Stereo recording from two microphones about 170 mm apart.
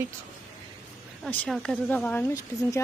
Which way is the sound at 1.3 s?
5° left (ahead or behind).